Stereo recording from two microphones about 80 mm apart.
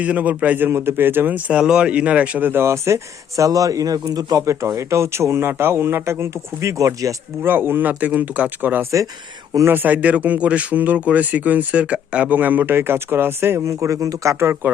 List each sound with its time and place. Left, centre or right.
0.0 s speech: centre
2.5 s speech: right
4.4 s speech: right
7.4 s speech: right
13.7 s speech: right